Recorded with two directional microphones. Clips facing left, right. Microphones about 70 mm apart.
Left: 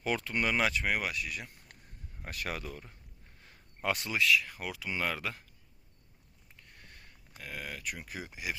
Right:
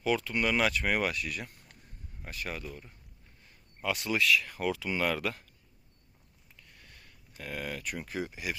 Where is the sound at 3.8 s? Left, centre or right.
Left.